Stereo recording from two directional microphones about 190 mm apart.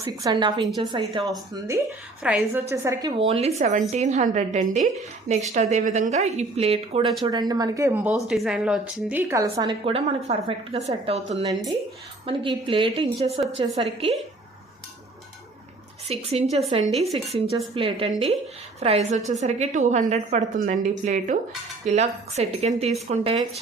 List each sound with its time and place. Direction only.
0.0 s a woman's voice: 20° right (ahead or behind)
2.2 s a woman's voice: 10° right (ahead or behind)
3.2 s a woman's voice: 30° right (ahead or behind)
12.2 s a woman's voice: 25° right (ahead or behind)
16.0 s a woman's voice: 35° right (ahead or behind)